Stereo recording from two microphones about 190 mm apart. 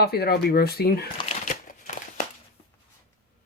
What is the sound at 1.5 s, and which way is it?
Crumpling, 45° left (ahead or behind).